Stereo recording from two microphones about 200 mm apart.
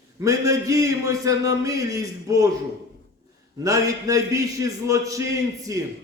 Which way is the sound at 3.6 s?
15° right (ahead or behind).